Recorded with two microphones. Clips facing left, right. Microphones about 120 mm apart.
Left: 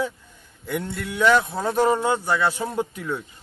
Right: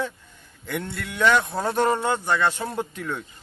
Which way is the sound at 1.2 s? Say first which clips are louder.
Left 2 dB; 5° left (ahead or behind).